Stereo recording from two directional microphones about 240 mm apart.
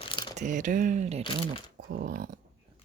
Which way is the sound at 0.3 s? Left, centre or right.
Right.